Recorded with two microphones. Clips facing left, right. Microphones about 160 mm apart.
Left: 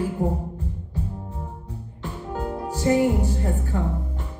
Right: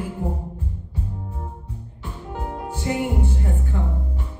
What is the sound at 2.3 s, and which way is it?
Music, 40° left (ahead or behind).